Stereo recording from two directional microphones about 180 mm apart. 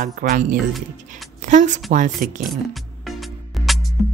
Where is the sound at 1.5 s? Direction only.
45° right (ahead or behind).